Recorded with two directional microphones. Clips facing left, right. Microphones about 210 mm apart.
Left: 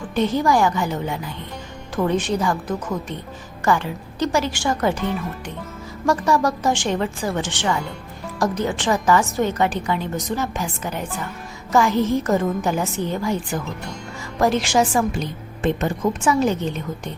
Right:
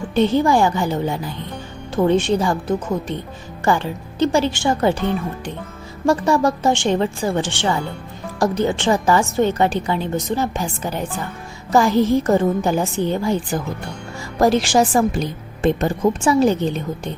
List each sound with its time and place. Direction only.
0.1 s a woman's voice: 30° right (ahead or behind)